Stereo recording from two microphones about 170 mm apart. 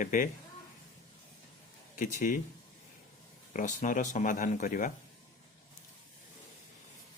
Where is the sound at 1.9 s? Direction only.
50° left (ahead or behind).